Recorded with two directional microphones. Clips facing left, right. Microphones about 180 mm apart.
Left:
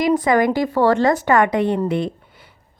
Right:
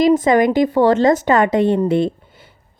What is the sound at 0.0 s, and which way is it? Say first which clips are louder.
A woman's voice: right 3 dB; 25° right (ahead or behind).